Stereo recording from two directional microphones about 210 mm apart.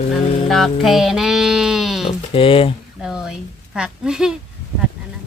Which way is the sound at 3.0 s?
5° right (ahead or behind).